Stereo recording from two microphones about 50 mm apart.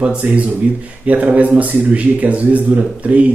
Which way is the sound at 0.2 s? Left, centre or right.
Right.